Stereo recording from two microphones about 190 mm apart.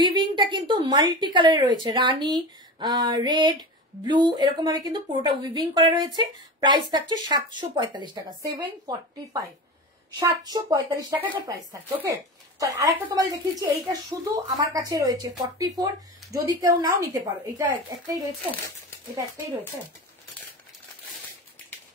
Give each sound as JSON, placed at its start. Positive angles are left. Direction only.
{"t": 0.0, "sound": "a woman's voice", "side_deg": -25}